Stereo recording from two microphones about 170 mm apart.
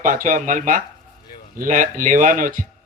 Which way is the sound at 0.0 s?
50° right (ahead or behind).